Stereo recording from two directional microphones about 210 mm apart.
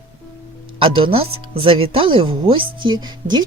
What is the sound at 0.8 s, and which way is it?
Speech, 25° right (ahead or behind).